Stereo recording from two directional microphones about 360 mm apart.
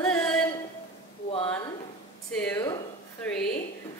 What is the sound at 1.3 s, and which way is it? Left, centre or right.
Speech, centre.